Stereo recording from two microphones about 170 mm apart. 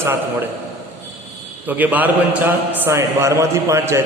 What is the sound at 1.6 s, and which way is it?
A man's voice, 10° right (ahead or behind).